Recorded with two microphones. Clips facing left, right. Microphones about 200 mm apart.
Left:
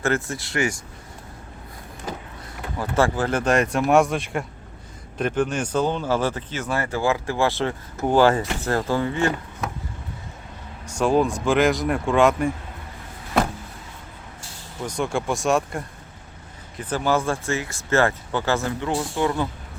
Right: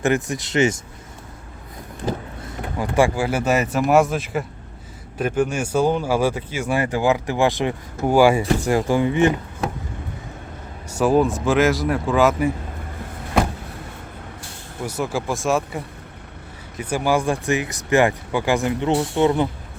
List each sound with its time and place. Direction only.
0.0 s speech: 15° right (ahead or behind)
2.7 s speech: 15° right (ahead or behind)
10.8 s speech: 5° right (ahead or behind)
14.8 s speech: 5° right (ahead or behind)
16.8 s speech: 10° right (ahead or behind)